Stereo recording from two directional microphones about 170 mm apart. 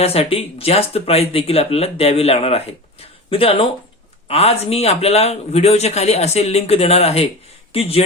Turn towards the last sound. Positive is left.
turn(degrees=35)  # may be behind; listen again after turning